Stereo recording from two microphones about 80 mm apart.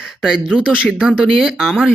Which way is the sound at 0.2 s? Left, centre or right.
Centre.